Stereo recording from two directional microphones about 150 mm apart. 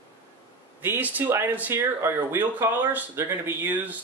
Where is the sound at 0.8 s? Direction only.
10° right (ahead or behind).